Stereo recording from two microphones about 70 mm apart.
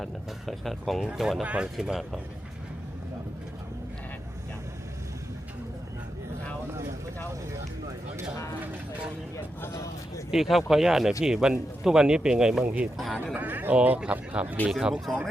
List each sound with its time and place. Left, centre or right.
0.0 s speech: centre
1.7 s speech: centre
9.7 s a sound: left
10.3 s speech: centre
12.6 s speech: centre
13.3 s a sound: right
13.7 s speech: centre